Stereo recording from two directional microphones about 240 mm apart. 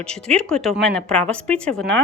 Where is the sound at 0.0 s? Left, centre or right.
Centre.